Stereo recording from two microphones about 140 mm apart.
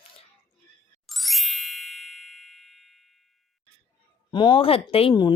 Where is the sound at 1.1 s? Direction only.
Centre (ahead or behind).